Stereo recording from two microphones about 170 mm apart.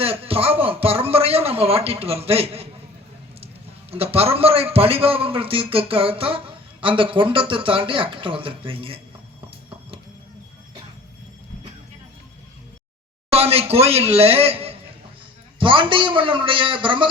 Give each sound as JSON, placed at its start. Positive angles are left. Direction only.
{"t": 0.0, "sound": "a sound", "side_deg": -35}
{"t": 3.9, "sound": "a man's voice", "side_deg": -35}
{"t": 13.3, "sound": "a man's voice", "side_deg": -35}